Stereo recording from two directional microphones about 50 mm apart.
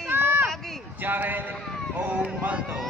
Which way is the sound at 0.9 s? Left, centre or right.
Right.